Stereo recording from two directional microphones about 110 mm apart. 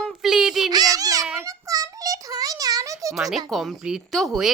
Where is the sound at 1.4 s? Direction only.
30° right (ahead or behind).